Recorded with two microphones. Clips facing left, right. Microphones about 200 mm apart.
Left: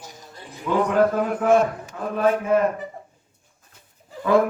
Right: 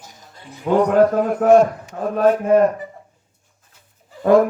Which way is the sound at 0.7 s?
40° right (ahead or behind).